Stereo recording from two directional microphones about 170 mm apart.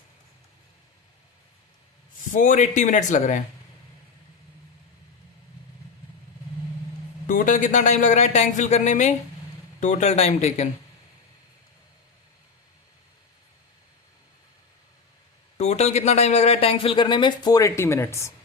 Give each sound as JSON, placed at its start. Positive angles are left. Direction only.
{"t": 2.3, "sound": "speech", "side_deg": 50}
{"t": 7.3, "sound": "speech", "side_deg": 50}
{"t": 15.5, "sound": "speech", "side_deg": 40}